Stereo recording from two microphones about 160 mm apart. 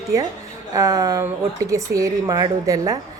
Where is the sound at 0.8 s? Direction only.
20° right (ahead or behind).